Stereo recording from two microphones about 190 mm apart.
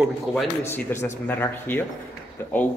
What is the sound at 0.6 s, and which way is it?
Speech, 10° left (ahead or behind).